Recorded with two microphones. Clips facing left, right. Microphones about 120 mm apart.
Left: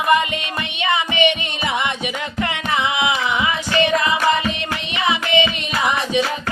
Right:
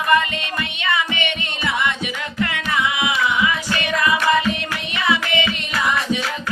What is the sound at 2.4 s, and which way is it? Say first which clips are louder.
Carnatic music: even; 25° left (ahead or behind).